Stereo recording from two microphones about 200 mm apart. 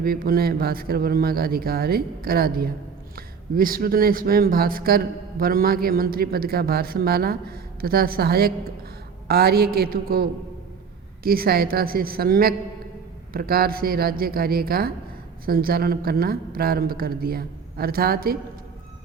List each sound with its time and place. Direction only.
0.0 s a man's voice: 50° right (ahead or behind)